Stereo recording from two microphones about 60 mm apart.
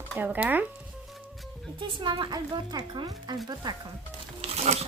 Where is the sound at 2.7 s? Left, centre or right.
Right.